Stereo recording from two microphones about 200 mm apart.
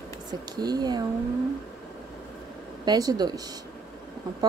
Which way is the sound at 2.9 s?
20° right (ahead or behind).